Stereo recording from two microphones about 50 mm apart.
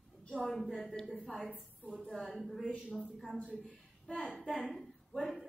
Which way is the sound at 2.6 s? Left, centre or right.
Left.